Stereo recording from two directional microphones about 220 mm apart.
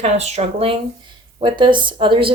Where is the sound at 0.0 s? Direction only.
30° right (ahead or behind).